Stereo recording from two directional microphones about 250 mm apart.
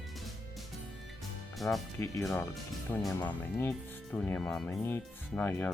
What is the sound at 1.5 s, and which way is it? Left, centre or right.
Speech, centre.